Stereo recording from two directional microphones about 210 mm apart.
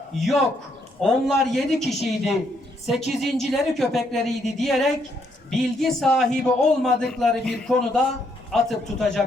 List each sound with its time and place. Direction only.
0.2 s a man's voice: centre (ahead or behind)